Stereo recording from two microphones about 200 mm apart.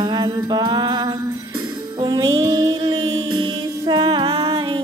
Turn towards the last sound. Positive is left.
turn(degrees=-25)  # may be behind; listen again after turning